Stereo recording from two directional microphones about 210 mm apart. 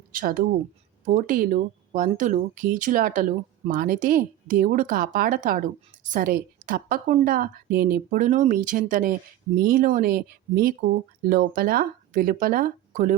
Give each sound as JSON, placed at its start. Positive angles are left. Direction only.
{"t": 0.1, "sound": "speech", "side_deg": -40}